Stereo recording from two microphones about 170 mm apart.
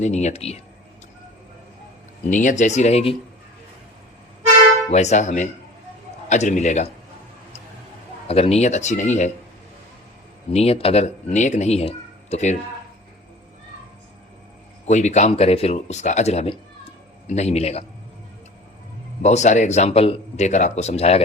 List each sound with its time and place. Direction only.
0.0 s speech: 45° left (ahead or behind)
2.3 s speech: 50° left (ahead or behind)
4.9 s speech: 40° left (ahead or behind)
8.3 s speech: 35° left (ahead or behind)
10.5 s speech: 35° left (ahead or behind)
14.8 s speech: 45° left (ahead or behind)
19.2 s speech: 45° left (ahead or behind)